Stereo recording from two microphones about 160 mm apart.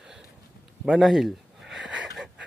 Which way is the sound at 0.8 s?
Centre (ahead or behind).